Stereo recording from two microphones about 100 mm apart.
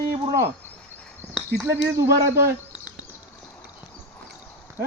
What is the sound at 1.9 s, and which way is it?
Speech, 25° right (ahead or behind).